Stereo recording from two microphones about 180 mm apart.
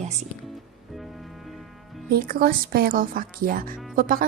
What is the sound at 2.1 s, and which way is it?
Speech, 55° right (ahead or behind).